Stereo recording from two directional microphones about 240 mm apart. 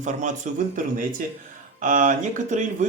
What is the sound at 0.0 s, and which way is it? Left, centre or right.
Speech, right.